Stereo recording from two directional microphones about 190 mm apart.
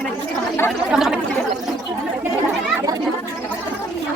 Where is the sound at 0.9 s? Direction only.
Centre (ahead or behind).